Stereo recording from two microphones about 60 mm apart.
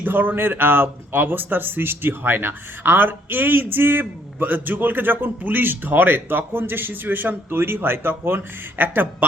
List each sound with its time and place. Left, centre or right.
0.0 s speech: right